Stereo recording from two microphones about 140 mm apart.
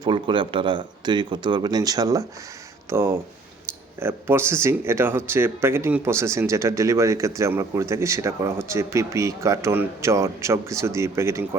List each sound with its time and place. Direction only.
0.0 s speech: 35° right (ahead or behind); by 11.4 s 20° right (ahead or behind)